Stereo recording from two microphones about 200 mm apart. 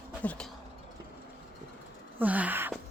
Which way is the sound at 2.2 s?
10° right (ahead or behind).